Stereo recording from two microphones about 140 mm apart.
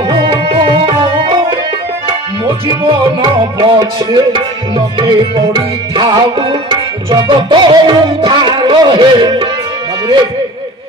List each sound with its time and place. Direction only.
0.3 s tabla: 35° right (ahead or behind)
2.4 s tabla: 35° right (ahead or behind)